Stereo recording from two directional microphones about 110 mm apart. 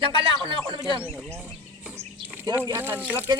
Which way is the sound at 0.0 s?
55° right (ahead or behind).